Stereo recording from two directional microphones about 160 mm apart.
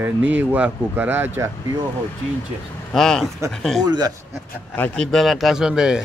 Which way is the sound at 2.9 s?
Centre (ahead or behind).